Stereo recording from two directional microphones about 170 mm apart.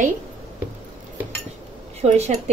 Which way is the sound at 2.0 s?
40° right (ahead or behind).